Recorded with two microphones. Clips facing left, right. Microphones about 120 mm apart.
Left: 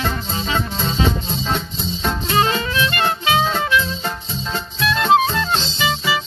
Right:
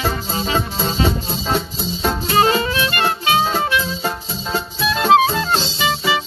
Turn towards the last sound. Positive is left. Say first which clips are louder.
# right 2 dB
turn(degrees=0)  # may be behind; listen again after turning